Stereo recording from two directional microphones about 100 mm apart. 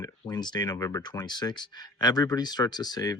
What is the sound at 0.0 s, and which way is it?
Speech, 45° left (ahead or behind).